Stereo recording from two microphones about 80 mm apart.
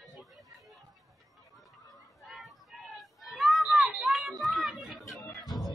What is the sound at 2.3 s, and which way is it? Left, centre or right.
Children playing, centre.